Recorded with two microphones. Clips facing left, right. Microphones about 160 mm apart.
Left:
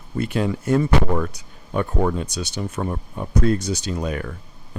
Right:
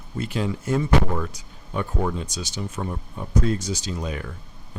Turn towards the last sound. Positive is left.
turn(degrees=60)  # may be behind; listen again after turning